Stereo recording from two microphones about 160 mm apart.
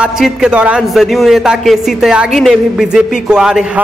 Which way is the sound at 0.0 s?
5° right (ahead or behind).